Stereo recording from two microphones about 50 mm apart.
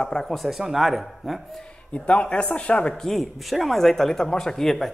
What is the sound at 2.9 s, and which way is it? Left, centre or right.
Speech, centre.